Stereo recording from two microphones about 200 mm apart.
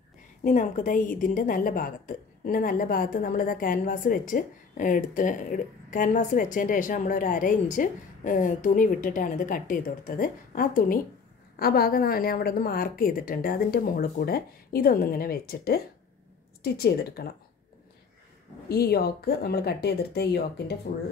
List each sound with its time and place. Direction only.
0.4 s a woman's voice: 40° left (ahead or behind)
18.7 s a woman's voice: 50° left (ahead or behind)